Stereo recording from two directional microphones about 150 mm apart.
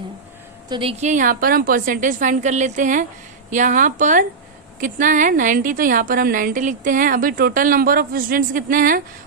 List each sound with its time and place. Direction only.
0.7 s a woman's voice: 40° right (ahead or behind); by 9.0 s 65° right (ahead or behind)